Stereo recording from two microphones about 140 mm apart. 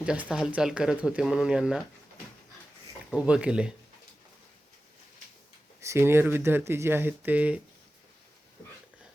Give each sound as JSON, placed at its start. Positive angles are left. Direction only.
{"t": 0.0, "sound": "speech", "side_deg": -5}
{"t": 3.1, "sound": "speech", "side_deg": -5}
{"t": 5.8, "sound": "speech", "side_deg": -20}